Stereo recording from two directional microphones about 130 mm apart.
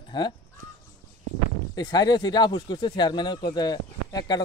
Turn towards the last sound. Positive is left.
turn(degrees=30)  # may be behind; listen again after turning